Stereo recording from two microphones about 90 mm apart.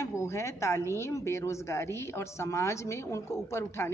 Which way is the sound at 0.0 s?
35° left (ahead or behind).